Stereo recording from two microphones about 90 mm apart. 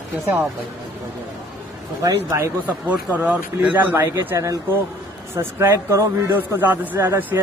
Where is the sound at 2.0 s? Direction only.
40° right (ahead or behind).